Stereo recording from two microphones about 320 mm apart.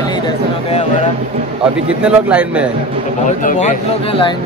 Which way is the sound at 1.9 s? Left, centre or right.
Centre.